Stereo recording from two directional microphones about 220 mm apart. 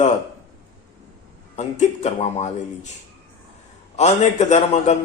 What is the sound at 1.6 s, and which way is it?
Speech, 30° left (ahead or behind).